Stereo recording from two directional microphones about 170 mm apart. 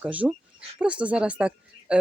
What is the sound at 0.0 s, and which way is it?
Speech, 10° right (ahead or behind).